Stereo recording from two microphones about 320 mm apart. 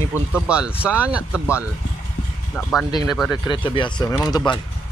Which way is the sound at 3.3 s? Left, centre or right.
Centre.